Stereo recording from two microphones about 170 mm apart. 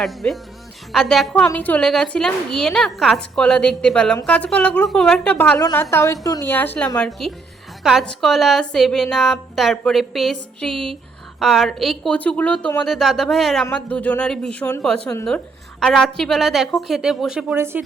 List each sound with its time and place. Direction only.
0.0 s a woman's voice: centre (ahead or behind)